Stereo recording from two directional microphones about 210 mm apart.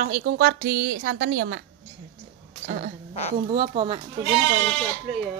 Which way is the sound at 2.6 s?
40° right (ahead or behind).